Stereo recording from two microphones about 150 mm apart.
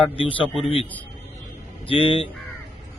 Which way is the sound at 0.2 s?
35° left (ahead or behind).